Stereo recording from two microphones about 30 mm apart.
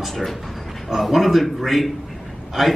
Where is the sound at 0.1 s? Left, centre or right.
Centre.